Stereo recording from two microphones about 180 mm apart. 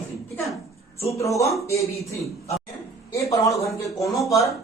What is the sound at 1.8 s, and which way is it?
Speech, 35° left (ahead or behind).